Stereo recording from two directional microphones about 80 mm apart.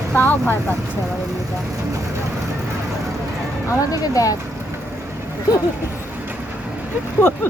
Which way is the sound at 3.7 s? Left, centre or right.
Left.